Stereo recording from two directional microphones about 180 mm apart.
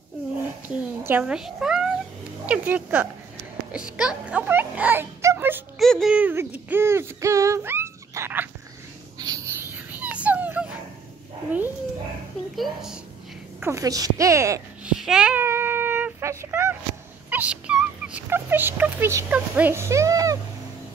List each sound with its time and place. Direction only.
0.7 s speech: 10° right (ahead or behind)
5.8 s speech: centre (ahead or behind)
9.2 s a sound: 20° right (ahead or behind)
12.5 s a woman's voice: centre (ahead or behind)
13.6 s speech: 15° right (ahead or behind)
14.9 s child singing: 5° right (ahead or behind)
17.3 s a sound: 5° right (ahead or behind)